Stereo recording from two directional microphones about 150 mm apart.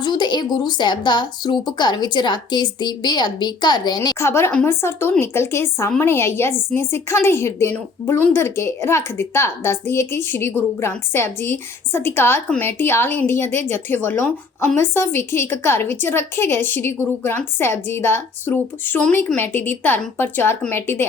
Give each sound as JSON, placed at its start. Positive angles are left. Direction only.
{"t": 0.0, "sound": "speech", "side_deg": 30}
{"t": 4.3, "sound": "a woman's voice", "side_deg": 15}